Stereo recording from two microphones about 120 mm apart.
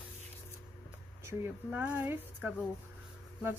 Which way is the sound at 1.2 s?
15° right (ahead or behind).